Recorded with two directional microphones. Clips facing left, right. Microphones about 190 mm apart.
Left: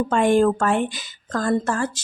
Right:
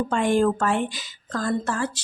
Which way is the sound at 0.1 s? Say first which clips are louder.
Left 4 dB; 55° left (ahead or behind).